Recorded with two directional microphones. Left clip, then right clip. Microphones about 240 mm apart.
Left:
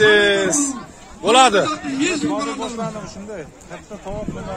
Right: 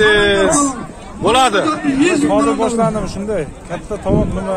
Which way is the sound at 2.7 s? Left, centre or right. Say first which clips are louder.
Right 11 dB; right.